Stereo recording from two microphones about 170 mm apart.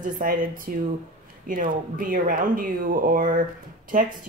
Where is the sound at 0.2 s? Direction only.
55° right (ahead or behind).